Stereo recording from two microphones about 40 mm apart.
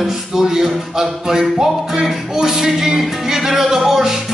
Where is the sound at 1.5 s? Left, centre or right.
Centre.